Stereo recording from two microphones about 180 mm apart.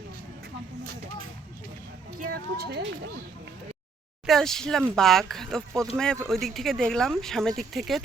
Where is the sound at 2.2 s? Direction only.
65° right (ahead or behind).